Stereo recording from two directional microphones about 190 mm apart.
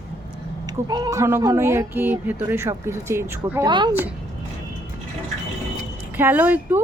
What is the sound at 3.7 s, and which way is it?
Speech, 25° right (ahead or behind).